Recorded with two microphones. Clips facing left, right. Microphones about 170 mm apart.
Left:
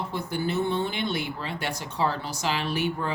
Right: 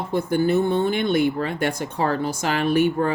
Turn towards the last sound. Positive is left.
turn(degrees=-50)  # may be behind; listen again after turning